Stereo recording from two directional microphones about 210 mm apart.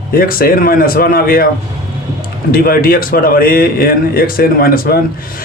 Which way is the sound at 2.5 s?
45° left (ahead or behind).